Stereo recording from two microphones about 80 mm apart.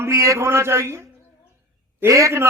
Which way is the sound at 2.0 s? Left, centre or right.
Right.